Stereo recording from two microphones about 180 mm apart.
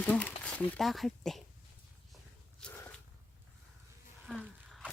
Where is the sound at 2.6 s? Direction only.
10° left (ahead or behind).